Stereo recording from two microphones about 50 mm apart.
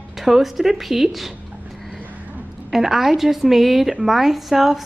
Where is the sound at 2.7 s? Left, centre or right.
Centre.